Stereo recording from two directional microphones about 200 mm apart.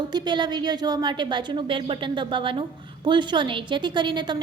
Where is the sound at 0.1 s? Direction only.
20° right (ahead or behind).